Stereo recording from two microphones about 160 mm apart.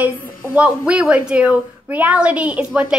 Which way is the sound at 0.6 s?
5° right (ahead or behind).